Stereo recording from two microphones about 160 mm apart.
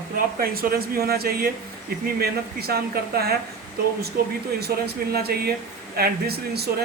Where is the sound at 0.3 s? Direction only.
70° right (ahead or behind).